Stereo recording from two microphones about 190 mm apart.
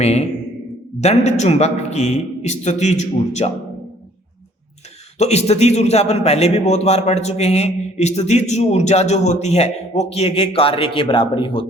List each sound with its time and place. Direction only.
0.0 s a man's voice: 35° left (ahead or behind)
5.1 s a man's voice: 35° left (ahead or behind)